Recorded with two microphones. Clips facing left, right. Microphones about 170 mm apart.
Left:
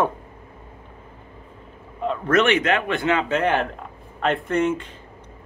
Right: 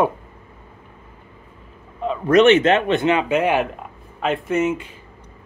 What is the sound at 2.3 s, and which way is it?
Speech, 20° right (ahead or behind).